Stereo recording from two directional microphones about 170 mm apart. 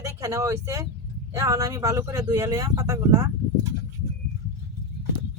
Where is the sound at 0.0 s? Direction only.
20° right (ahead or behind).